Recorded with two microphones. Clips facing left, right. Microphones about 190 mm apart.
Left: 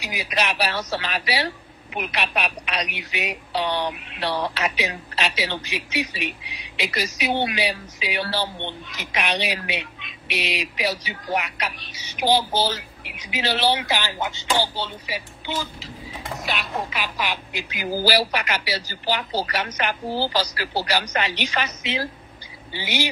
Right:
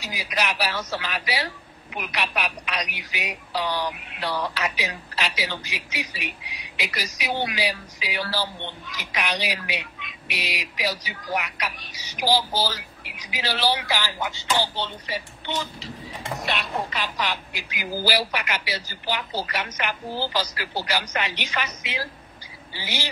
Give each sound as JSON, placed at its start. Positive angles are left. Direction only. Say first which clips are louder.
{"t": 0.0, "sound": "a woman's voice", "louder": "left 2 dB", "side_deg": 20}
{"t": 14.8, "sound": "speech", "louder": "even", "side_deg": 5}
{"t": 17.5, "sound": "a woman's voice", "louder": "left 5 dB", "side_deg": 20}
{"t": 18.0, "sound": "a woman's voice", "louder": "left 3 dB", "side_deg": 35}
{"t": 22.7, "sound": "speech", "louder": "left 6 dB", "side_deg": 20}